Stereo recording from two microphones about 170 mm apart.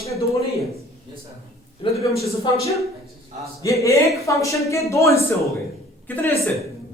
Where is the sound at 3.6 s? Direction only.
20° left (ahead or behind).